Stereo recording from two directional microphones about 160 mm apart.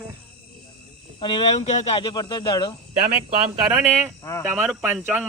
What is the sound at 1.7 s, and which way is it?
Speech, 45° left (ahead or behind).